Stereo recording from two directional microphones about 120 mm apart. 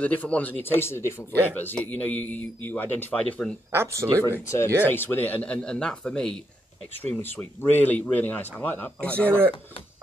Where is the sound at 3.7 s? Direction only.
20° right (ahead or behind).